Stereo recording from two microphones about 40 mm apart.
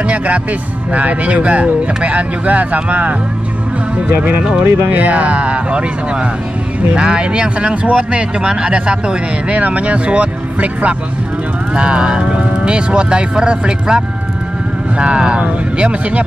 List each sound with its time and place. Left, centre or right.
0.0 s speech: right
4.4 s speech: right
4.8 s speech: right
9.6 s speech: right